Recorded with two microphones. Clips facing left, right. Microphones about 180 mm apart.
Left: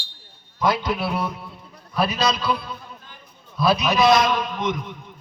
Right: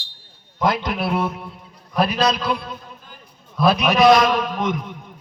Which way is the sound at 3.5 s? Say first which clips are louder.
Right 3 dB; 55° right (ahead or behind).